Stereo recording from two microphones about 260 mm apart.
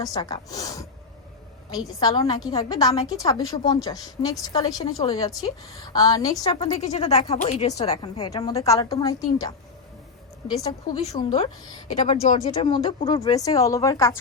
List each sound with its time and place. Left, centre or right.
0.0 s a woman's voice: centre
2.0 s a woman's voice: centre
10.6 s a woman's voice: left